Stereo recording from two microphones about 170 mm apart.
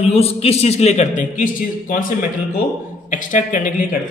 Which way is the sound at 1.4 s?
55° left (ahead or behind).